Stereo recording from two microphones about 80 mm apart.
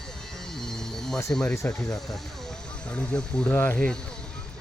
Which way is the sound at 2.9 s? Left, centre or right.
Centre.